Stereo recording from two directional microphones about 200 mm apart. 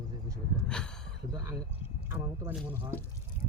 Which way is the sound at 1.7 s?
10° right (ahead or behind).